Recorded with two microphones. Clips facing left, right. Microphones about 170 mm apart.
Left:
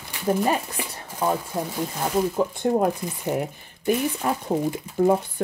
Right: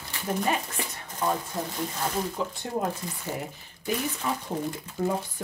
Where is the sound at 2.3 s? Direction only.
50° left (ahead or behind).